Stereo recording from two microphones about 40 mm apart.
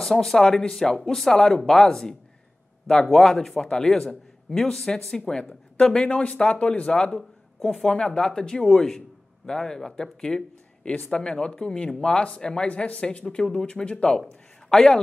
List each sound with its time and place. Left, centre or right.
0.0 s speech: centre
3.6 s speech: centre
5.9 s speech: left
7.2 s a sound: centre
7.8 s speech: left
12.6 s speech: left; by 15.0 s centre